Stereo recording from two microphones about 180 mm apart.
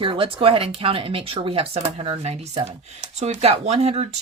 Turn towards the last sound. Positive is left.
turn(degrees=-35)  # may be behind; listen again after turning